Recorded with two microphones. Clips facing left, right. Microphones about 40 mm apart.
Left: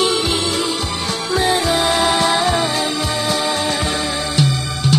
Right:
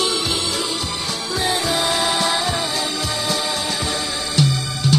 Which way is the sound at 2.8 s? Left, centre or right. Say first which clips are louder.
Left 4 dB; left.